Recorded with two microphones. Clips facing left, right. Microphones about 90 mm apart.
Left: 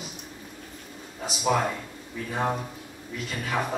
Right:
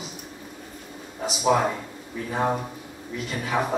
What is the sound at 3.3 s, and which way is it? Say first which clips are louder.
Speech: right 3 dB; 5° right (ahead or behind).